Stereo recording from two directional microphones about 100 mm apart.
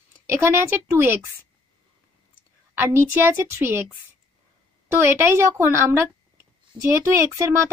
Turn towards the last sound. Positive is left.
turn(degrees=-30)  # may be behind; listen again after turning